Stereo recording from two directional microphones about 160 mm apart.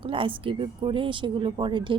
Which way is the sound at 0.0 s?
35° right (ahead or behind).